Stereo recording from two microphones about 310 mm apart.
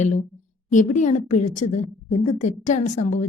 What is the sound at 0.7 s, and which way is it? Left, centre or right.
A woman's voice, left.